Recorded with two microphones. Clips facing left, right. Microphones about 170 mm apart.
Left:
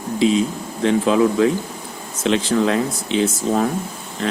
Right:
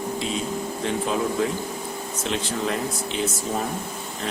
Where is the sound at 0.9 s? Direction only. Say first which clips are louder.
Left 10 dB; 90° left.